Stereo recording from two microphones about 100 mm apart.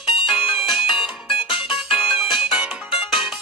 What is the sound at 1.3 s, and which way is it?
Music, 60° left (ahead or behind).